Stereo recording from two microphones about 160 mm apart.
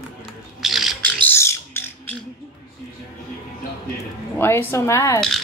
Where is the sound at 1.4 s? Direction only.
15° left (ahead or behind).